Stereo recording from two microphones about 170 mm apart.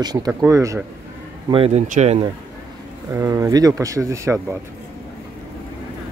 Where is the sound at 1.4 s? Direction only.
35° right (ahead or behind).